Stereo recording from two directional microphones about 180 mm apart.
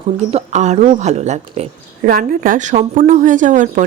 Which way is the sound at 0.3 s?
40° right (ahead or behind).